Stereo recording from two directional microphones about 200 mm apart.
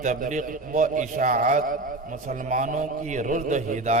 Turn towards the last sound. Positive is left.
turn(degrees=-40)  # may be behind; listen again after turning